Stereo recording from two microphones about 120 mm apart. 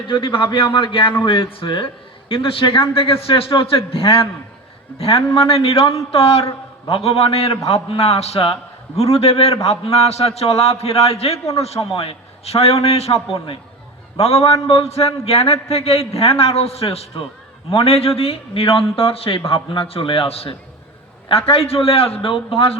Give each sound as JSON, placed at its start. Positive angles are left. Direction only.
{"t": 0.1, "sound": "a man's voice", "side_deg": 45}
{"t": 6.4, "sound": "a man's voice", "side_deg": 30}
{"t": 6.9, "sound": "a man's voice", "side_deg": 55}
{"t": 14.2, "sound": "a man's voice", "side_deg": 60}